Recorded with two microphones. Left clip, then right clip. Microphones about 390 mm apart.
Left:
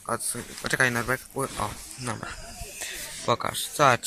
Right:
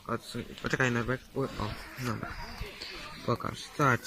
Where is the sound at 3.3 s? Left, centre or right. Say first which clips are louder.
Left 8 dB; centre.